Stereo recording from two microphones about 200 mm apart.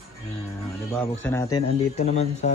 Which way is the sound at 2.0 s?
35° left (ahead or behind).